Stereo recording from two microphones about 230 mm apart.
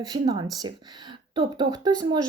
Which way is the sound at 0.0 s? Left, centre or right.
Centre.